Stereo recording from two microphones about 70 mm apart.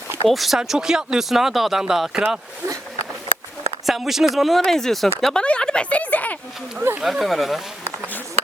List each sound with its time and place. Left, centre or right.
0.3 s speech: centre
3.8 s a woman's voice: centre; by 6.3 s left
7.0 s speech: centre